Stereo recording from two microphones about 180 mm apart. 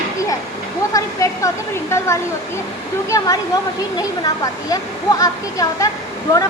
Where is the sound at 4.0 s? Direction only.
20° left (ahead or behind).